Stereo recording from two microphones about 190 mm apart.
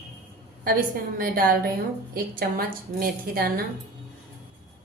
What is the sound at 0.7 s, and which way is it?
A woman's voice, 50° right (ahead or behind).